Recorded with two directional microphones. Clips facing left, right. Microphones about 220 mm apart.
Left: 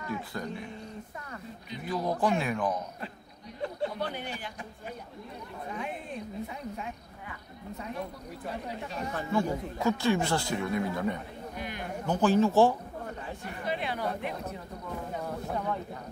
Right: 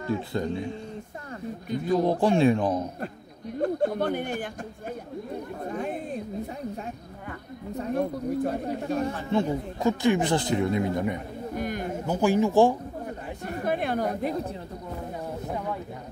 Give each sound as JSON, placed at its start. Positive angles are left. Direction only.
{"t": 0.0, "sound": "speech", "side_deg": -25}
{"t": 2.0, "sound": "speech", "side_deg": -30}
{"t": 3.0, "sound": "a man's voice", "side_deg": -50}
{"t": 5.6, "sound": "chatter", "side_deg": -45}
{"t": 6.4, "sound": "speech", "side_deg": -40}
{"t": 9.3, "sound": "speech", "side_deg": -20}
{"t": 11.5, "sound": "a sound", "side_deg": -45}
{"t": 12.1, "sound": "a man's voice", "side_deg": -10}
{"t": 13.4, "sound": "chatter", "side_deg": -45}
{"t": 15.2, "sound": "a sound", "side_deg": -15}